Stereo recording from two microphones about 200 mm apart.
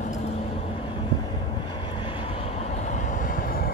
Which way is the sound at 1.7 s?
25° left (ahead or behind).